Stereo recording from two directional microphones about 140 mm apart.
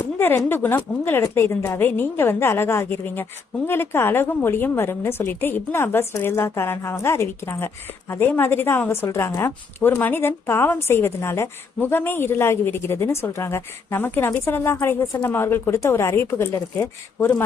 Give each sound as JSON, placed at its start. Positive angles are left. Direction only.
{"t": 0.0, "sound": "a woman's voice", "side_deg": 15}